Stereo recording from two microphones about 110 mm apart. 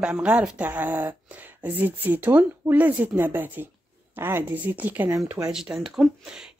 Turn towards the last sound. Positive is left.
turn(degrees=-5)  # may be behind; listen again after turning